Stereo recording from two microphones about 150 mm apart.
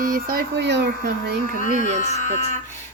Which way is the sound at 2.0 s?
50° left (ahead or behind).